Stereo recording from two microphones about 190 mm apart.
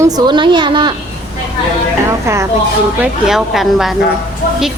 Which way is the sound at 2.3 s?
15° right (ahead or behind).